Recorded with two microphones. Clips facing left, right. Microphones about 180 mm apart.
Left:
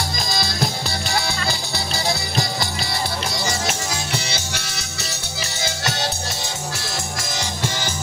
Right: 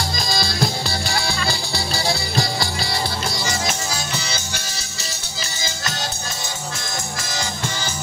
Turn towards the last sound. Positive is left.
turn(degrees=75)  # may be behind; listen again after turning